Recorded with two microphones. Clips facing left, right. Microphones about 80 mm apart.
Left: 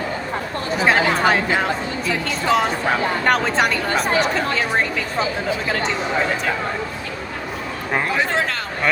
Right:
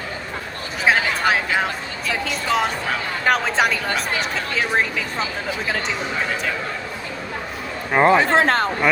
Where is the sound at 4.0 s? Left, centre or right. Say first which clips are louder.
Left 5 dB; left.